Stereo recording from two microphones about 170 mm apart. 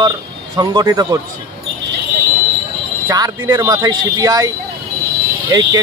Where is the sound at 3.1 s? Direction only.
20° right (ahead or behind).